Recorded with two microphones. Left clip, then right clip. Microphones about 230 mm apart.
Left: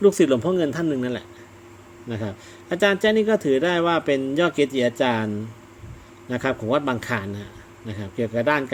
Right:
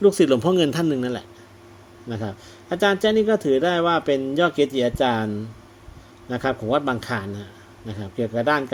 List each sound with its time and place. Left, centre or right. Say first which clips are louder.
0.3 s speech: right 2 dB; centre
2.0 s speech: even; centre